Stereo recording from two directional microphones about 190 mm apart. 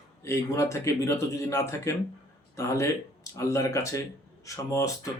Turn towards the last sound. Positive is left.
turn(degrees=15)  # may be behind; listen again after turning